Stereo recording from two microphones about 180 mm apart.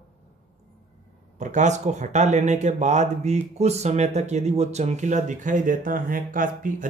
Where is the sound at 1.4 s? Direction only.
40° right (ahead or behind).